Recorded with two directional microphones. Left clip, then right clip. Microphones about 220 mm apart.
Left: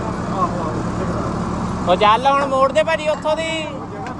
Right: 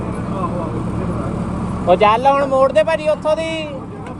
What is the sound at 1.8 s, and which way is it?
Speech, 10° right (ahead or behind).